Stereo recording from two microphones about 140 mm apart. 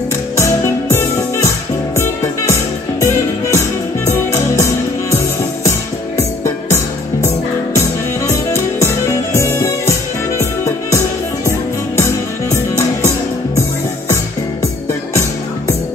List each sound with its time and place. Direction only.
2.0 s music: 20° left (ahead or behind)